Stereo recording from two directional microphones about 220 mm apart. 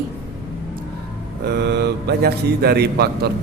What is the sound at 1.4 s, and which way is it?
A woman's voice, 50° right (ahead or behind).